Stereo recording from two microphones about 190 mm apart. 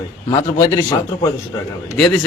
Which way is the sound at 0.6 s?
20° left (ahead or behind).